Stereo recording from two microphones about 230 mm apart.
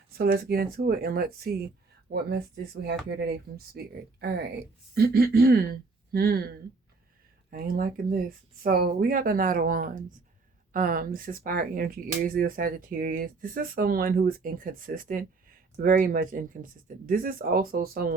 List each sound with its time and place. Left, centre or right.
0.2 s speech: right
3.2 s speech: right